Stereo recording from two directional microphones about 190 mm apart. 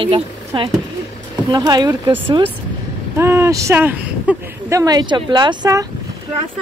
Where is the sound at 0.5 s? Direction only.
25° right (ahead or behind).